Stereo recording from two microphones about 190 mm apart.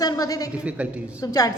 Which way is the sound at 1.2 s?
20° left (ahead or behind).